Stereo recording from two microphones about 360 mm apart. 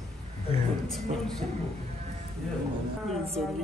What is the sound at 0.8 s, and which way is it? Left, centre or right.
Speech, centre.